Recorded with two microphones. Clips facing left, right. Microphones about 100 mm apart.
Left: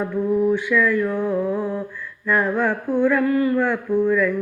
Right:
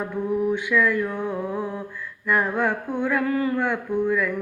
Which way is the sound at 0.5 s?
20° right (ahead or behind).